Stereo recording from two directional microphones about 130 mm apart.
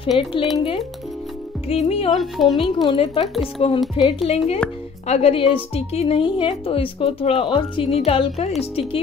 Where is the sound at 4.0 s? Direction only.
45° left (ahead or behind).